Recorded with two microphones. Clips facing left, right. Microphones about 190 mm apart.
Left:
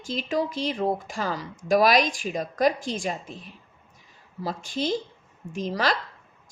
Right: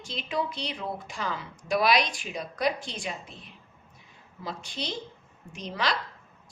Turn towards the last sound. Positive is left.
turn(degrees=45)  # may be behind; listen again after turning